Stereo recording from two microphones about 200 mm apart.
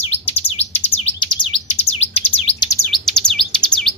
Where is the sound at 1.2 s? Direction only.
25° left (ahead or behind).